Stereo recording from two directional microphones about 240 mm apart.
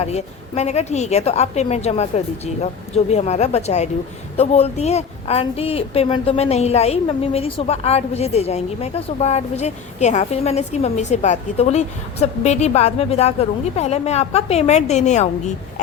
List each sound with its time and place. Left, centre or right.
0.0 s a woman's voice: left